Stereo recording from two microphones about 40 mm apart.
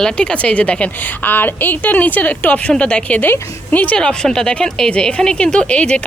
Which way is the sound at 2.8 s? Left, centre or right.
Left.